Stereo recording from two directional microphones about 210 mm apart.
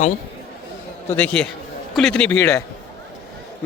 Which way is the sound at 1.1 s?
5° left (ahead or behind).